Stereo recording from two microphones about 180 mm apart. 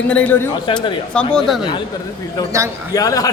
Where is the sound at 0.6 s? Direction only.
25° left (ahead or behind).